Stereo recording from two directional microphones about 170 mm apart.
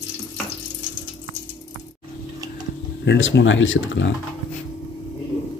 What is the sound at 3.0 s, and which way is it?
Speech, 90° left.